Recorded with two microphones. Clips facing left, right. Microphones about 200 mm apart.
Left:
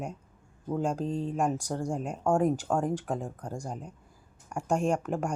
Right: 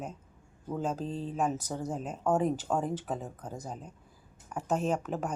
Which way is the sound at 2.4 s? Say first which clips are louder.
Left 3 dB; 10° left (ahead or behind).